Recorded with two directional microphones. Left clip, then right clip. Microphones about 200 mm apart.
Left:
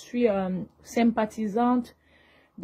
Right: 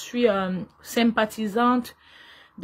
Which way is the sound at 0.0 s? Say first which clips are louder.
Right 3 dB; 15° right (ahead or behind).